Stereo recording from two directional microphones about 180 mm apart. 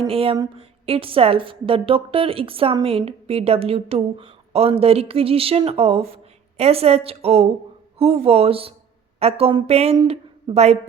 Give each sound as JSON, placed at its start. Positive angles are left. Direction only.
{"t": 0.1, "sound": "a woman's voice", "side_deg": -30}